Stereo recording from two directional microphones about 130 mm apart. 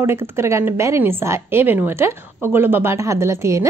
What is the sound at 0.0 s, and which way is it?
A woman's voice, 20° right (ahead or behind).